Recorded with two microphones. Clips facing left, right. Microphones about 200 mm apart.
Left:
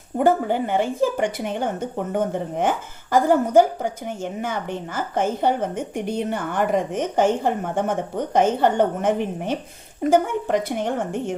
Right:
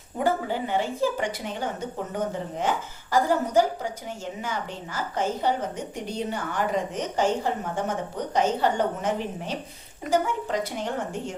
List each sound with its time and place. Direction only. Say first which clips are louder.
0.2 s a woman's voice: left 6 dB; 55° left (ahead or behind)